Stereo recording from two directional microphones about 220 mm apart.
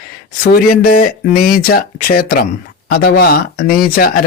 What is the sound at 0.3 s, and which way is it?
Speech, 40° left (ahead or behind).